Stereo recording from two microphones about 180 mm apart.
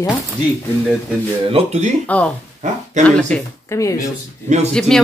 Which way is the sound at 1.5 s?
40° right (ahead or behind).